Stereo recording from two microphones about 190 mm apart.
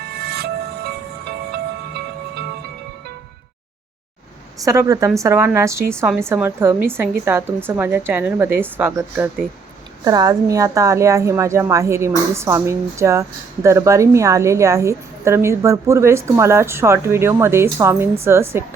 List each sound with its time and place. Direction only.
0.1 s music: 60° right (ahead or behind)
4.6 s a woman's voice: 15° right (ahead or behind)